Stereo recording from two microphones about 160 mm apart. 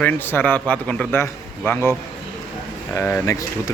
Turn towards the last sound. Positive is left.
turn(degrees=15)  # may be behind; listen again after turning